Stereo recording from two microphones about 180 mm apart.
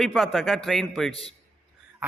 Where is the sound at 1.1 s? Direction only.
35° left (ahead or behind).